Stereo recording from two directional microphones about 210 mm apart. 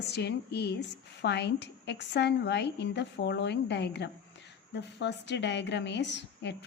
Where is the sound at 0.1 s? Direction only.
50° left (ahead or behind).